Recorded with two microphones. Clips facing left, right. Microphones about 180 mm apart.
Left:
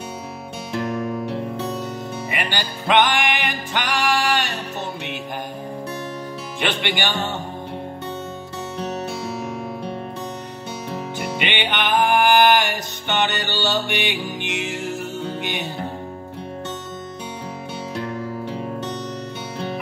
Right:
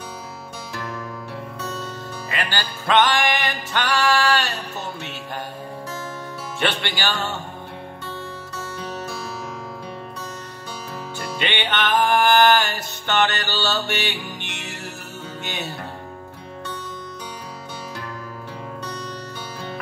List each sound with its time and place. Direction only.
0.7 s music: 20° left (ahead or behind)
6.6 s music: 20° left (ahead or behind)
11.1 s music: 15° left (ahead or behind)